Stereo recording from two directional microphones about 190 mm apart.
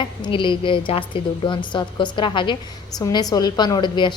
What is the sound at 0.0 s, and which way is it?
A woman's voice, 25° left (ahead or behind).